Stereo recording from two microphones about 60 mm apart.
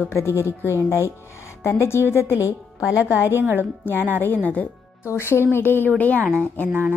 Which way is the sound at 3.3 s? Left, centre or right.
Right.